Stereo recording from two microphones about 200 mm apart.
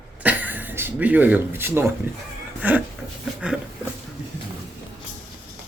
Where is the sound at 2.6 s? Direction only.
10° right (ahead or behind).